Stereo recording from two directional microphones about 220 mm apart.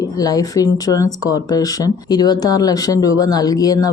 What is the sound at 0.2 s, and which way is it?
Speech, 15° left (ahead or behind).